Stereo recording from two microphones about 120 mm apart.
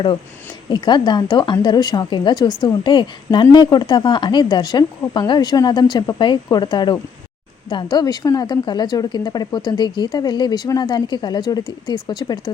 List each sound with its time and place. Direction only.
0.7 s a woman's voice: 40° left (ahead or behind)